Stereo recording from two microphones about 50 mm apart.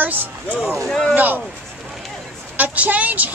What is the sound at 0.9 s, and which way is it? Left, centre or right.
Speech, centre.